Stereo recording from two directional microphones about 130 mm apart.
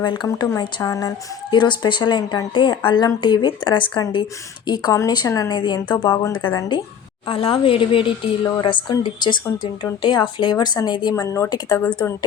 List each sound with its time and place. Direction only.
0.0 s a woman's voice: 35° left (ahead or behind)
1.5 s a woman's voice: 35° left (ahead or behind)
7.3 s a woman's voice: 45° left (ahead or behind); by 11.8 s 30° left (ahead or behind)